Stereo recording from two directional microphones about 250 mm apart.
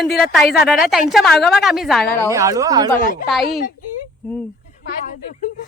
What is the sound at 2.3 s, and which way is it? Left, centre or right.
Speech, centre.